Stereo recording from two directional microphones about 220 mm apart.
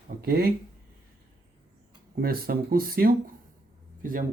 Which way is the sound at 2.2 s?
40° right (ahead or behind).